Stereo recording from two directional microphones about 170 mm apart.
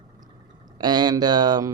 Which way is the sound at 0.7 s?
25° right (ahead or behind).